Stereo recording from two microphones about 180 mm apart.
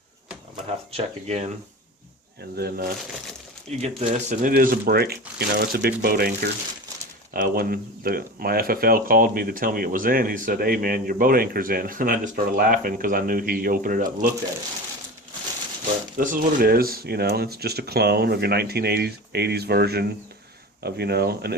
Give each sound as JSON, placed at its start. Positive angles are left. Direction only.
{"t": 0.9, "sound": "speech", "side_deg": -40}
{"t": 2.6, "sound": "speech", "side_deg": -60}
{"t": 3.8, "sound": "speech", "side_deg": -35}
{"t": 16.1, "sound": "speech", "side_deg": -50}